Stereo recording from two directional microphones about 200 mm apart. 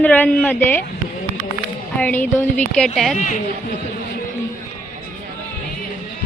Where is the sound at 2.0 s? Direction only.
10° left (ahead or behind).